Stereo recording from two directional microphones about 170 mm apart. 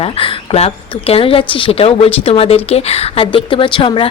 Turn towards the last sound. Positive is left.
turn(degrees=30)  # may be behind; listen again after turning